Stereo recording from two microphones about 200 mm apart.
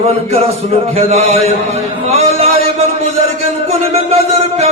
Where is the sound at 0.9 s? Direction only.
30° right (ahead or behind).